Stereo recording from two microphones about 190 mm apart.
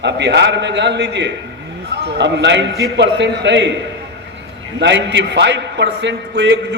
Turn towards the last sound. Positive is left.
turn(degrees=-65)  # may be behind; listen again after turning